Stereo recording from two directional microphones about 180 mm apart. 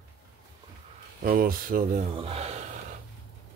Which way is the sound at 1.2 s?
55° right (ahead or behind).